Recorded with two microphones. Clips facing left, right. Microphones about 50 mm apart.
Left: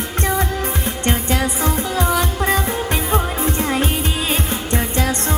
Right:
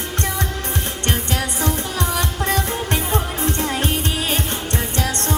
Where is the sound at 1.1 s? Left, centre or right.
Left.